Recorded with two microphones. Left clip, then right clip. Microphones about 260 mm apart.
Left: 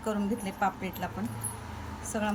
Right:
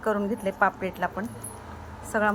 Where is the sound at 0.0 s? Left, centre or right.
Centre.